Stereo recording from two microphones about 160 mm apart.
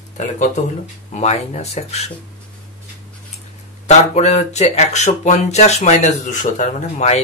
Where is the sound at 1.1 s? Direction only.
45° left (ahead or behind).